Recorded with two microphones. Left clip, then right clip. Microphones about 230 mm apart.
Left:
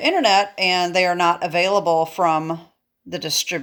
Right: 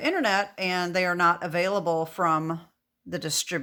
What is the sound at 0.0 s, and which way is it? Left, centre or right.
Speech, centre.